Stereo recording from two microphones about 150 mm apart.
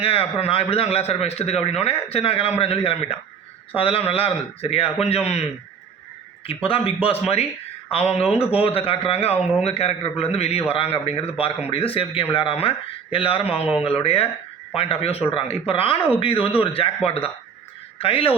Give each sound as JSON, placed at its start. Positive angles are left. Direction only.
{"t": 0.0, "sound": "a man's voice", "side_deg": 40}
{"t": 6.5, "sound": "a man's voice", "side_deg": 40}